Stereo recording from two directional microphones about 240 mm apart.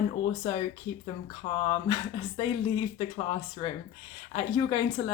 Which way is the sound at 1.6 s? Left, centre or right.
Centre.